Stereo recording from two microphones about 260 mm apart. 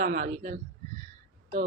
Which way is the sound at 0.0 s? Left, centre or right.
Right.